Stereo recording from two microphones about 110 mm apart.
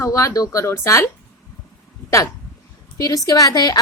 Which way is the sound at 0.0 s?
30° left (ahead or behind).